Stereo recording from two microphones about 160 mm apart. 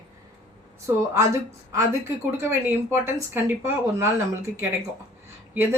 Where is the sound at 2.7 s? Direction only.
15° right (ahead or behind).